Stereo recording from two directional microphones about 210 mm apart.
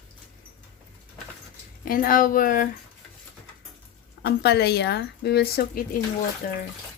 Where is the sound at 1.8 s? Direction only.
40° left (ahead or behind).